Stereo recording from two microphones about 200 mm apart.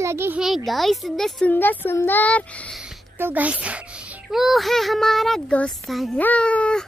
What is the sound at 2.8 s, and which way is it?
A child's voice, 5° right (ahead or behind).